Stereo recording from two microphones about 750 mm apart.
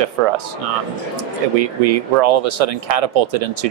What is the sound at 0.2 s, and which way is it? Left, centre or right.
Speech, right.